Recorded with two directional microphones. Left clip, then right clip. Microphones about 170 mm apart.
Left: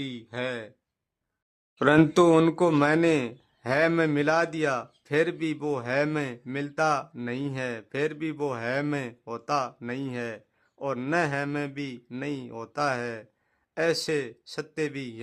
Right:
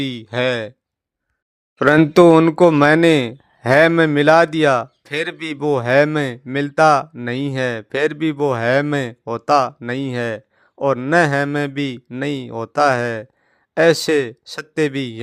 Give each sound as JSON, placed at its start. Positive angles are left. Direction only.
{"t": 0.0, "sound": "speech", "side_deg": -35}
{"t": 2.3, "sound": "speech", "side_deg": -20}
{"t": 2.8, "sound": "speech", "side_deg": -40}